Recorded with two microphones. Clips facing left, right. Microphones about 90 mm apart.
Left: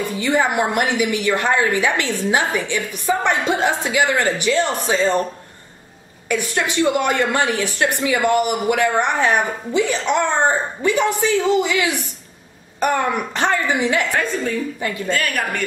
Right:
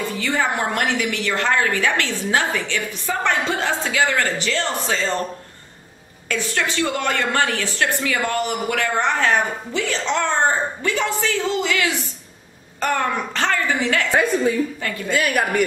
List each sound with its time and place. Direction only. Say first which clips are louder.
0.2 s a woman's voice: left 4 dB; 15° left (ahead or behind)
6.2 s a woman's voice: left 2 dB; 15° left (ahead or behind)
15.0 s a woman's voice: right 3 dB; 10° right (ahead or behind)